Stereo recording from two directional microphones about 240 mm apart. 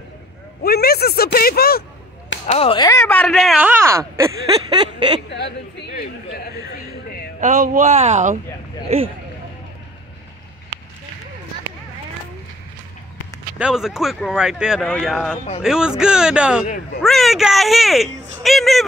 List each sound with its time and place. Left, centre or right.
0.7 s speech: left
2.4 s speech: left; by 4.0 s centre
4.2 s a sound: centre
5.3 s a sound: left
7.3 s speech: right
13.6 s speech: centre
16.6 s speech: left
17.0 s speech: centre